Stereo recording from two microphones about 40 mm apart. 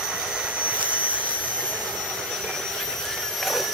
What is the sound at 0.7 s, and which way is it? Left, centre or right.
Vehicle, right.